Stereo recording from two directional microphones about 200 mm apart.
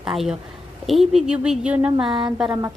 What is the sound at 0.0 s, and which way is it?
Speech, 5° right (ahead or behind).